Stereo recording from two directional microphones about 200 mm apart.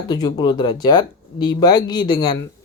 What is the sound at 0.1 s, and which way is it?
Speech, 20° left (ahead or behind).